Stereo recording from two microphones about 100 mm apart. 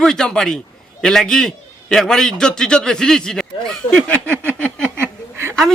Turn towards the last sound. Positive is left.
turn(degrees=-25)  # may be behind; listen again after turning